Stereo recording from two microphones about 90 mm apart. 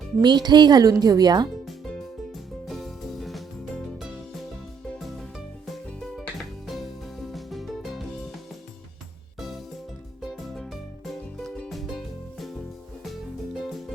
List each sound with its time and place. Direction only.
0.2 s speech: 55° right (ahead or behind)
2.6 s music: centre (ahead or behind)
6.7 s music: centre (ahead or behind)
10.2 s music: centre (ahead or behind)